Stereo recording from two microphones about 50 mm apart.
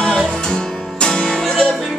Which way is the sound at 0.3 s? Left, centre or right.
Centre.